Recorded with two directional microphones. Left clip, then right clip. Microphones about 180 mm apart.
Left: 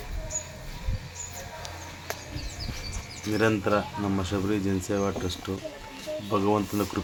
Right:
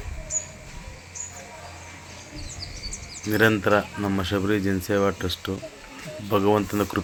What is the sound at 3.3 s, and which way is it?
Speech, 10° right (ahead or behind).